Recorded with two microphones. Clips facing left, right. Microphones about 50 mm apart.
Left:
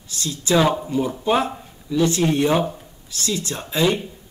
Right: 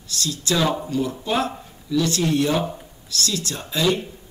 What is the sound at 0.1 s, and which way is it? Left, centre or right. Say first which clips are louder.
A man's voice: left 4 dB; left.